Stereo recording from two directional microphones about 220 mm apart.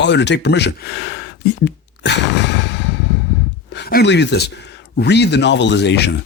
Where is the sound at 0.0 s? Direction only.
55° left (ahead or behind).